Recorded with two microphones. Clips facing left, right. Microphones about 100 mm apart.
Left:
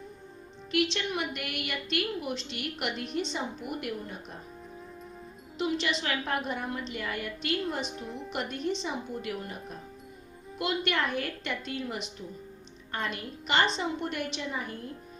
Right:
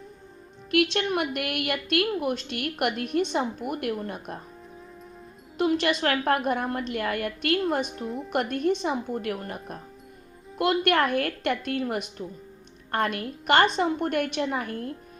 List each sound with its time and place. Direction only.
0.7 s a woman's voice: 55° right (ahead or behind)
5.5 s a woman's voice: 50° right (ahead or behind)
7.9 s a woman's voice: centre (ahead or behind)
8.3 s a woman's voice: 55° right (ahead or behind)